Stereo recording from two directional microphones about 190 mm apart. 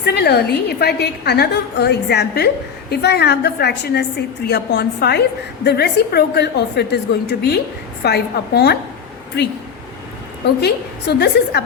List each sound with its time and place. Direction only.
0.0 s a woman's voice: 60° left (ahead or behind)
10.4 s a woman's voice: 60° left (ahead or behind)